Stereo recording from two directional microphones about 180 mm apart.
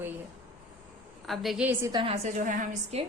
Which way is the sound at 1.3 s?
Centre (ahead or behind).